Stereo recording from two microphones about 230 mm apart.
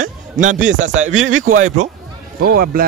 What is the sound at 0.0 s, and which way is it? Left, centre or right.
A man's voice, right.